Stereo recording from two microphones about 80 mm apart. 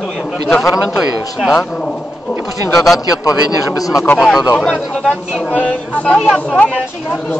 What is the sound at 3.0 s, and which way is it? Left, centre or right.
Speech, left.